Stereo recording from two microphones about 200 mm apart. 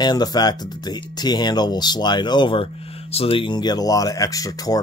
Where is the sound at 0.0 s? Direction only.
20° left (ahead or behind).